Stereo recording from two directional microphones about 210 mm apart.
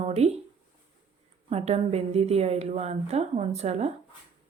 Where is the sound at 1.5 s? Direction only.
30° right (ahead or behind).